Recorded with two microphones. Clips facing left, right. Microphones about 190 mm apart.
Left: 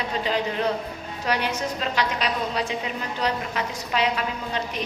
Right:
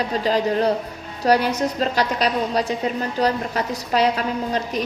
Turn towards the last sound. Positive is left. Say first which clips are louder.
# right 5 dB
turn(degrees=-40)  # may be behind; listen again after turning